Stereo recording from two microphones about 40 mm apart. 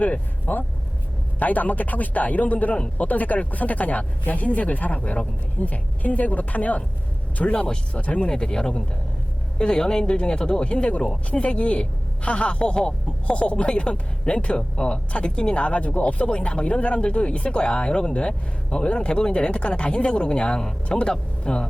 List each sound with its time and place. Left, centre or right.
0.0 s speech: left
7.5 s a woman's voice: centre
7.9 s speech: left
8.2 s a woman's voice: centre